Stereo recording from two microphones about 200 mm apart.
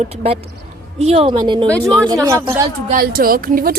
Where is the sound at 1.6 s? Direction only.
5° left (ahead or behind).